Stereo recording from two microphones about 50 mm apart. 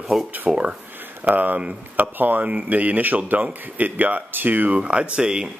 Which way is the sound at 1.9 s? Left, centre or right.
Right.